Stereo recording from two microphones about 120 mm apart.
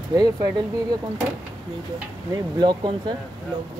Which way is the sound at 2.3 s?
40° right (ahead or behind).